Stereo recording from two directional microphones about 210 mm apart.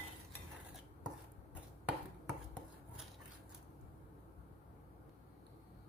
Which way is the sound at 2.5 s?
5° right (ahead or behind).